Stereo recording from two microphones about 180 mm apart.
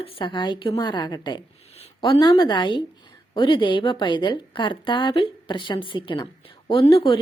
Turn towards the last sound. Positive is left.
turn(degrees=30)  # may be behind; listen again after turning